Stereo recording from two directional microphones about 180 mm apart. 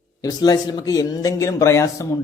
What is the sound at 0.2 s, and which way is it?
A man's voice, 20° left (ahead or behind).